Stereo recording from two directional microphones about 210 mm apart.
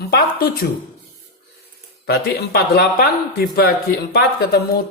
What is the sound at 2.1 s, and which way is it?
Speech, 50° left (ahead or behind).